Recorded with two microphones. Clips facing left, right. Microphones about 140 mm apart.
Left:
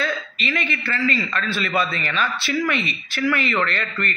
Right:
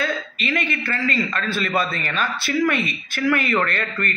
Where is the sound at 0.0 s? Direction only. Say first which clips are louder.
Right 1 dB; 50° right (ahead or behind).